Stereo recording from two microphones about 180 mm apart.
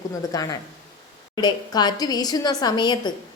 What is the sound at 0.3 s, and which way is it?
A woman's voice, 20° left (ahead or behind).